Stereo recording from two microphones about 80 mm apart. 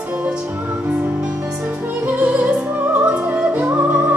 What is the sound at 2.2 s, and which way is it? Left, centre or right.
Music, centre.